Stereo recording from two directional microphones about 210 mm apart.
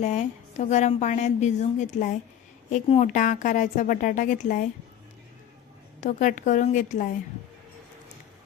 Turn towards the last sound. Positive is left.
turn(degrees=35)  # may be behind; listen again after turning